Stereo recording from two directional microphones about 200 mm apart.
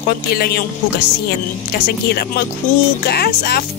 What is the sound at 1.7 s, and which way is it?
Speech, 50° left (ahead or behind).